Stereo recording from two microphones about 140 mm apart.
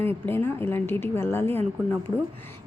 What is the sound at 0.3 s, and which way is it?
A woman's voice, 15° left (ahead or behind).